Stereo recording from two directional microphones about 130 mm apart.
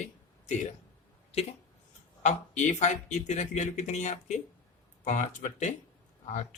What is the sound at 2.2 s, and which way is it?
Speech, 65° left (ahead or behind).